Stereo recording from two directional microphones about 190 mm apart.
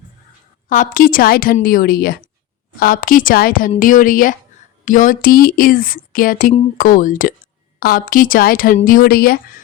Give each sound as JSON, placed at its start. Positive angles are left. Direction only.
{"t": 0.7, "sound": "a woman's voice", "side_deg": 45}